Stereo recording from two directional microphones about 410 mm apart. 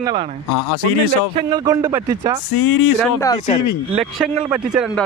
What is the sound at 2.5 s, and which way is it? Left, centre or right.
Speech, left.